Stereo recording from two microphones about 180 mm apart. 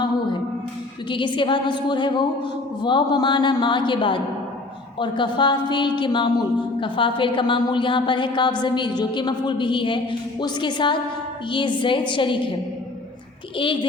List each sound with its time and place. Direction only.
1.1 s a woman's voice: 25° left (ahead or behind)